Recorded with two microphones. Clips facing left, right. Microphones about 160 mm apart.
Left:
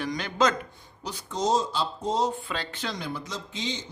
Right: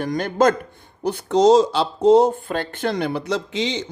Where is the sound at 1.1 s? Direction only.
65° right (ahead or behind).